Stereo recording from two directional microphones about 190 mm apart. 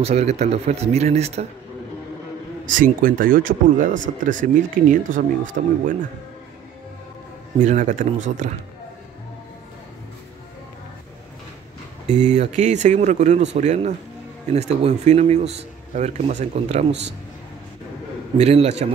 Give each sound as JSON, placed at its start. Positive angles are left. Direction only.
{"t": 0.0, "sound": "speech", "side_deg": -35}
{"t": 2.6, "sound": "speech", "side_deg": -45}
{"t": 7.6, "sound": "speech", "side_deg": -40}
{"t": 12.1, "sound": "speech", "side_deg": -40}
{"t": 18.4, "sound": "speech", "side_deg": -35}